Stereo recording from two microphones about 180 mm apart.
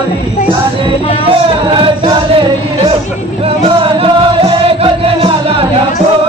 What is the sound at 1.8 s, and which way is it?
Chant, 30° right (ahead or behind).